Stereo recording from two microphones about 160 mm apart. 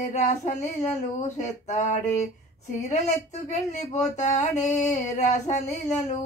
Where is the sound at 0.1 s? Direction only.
45° left (ahead or behind).